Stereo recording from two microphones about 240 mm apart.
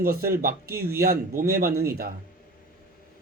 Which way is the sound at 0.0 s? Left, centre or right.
Right.